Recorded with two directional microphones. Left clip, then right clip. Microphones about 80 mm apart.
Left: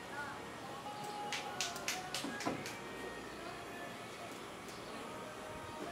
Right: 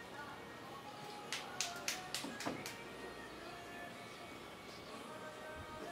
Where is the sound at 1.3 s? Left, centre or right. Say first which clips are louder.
Left 1 dB; right.